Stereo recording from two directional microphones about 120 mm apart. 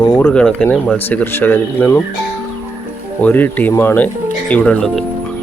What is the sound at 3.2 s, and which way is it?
Speech, 15° left (ahead or behind).